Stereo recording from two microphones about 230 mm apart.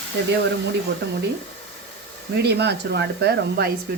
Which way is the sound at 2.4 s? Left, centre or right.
Right.